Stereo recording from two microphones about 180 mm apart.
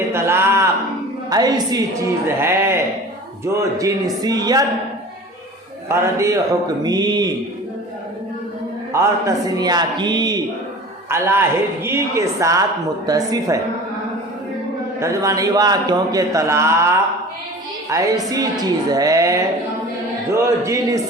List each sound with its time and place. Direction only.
0.1 s a sound: 15° right (ahead or behind)
1.3 s a man's voice: 20° right (ahead or behind)
5.9 s a man's voice: 15° right (ahead or behind)
8.9 s a man's voice: 15° right (ahead or behind)
14.9 s a man's voice: 15° right (ahead or behind)